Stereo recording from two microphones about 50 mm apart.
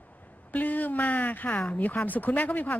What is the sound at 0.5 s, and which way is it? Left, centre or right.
Speech, left.